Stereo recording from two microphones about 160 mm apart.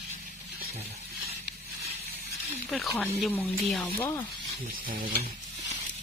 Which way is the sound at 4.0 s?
15° left (ahead or behind).